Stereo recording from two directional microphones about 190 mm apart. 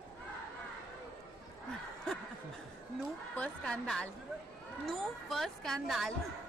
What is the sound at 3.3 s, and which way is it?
A woman's voice, 5° left (ahead or behind).